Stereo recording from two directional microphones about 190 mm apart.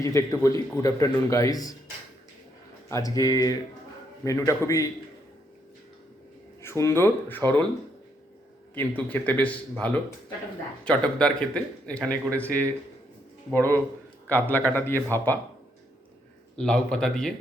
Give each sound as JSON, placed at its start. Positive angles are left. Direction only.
{"t": 0.0, "sound": "speech", "side_deg": 15}
{"t": 2.9, "sound": "speech", "side_deg": 20}
{"t": 6.6, "sound": "speech", "side_deg": 15}
{"t": 8.7, "sound": "speech", "side_deg": 10}
{"t": 16.6, "sound": "speech", "side_deg": 5}